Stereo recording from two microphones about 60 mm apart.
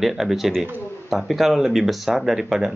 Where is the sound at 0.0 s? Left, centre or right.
Centre.